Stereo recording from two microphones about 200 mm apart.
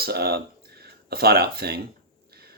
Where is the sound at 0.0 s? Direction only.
50° right (ahead or behind).